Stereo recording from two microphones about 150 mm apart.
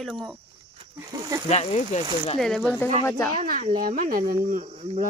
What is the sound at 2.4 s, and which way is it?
Speech, 5° left (ahead or behind).